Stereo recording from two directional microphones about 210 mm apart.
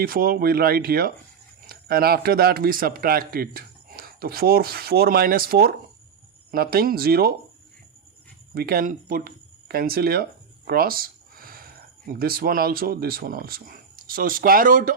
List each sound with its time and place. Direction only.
0.0 s speech: 45° right (ahead or behind)
8.5 s speech: 45° right (ahead or behind)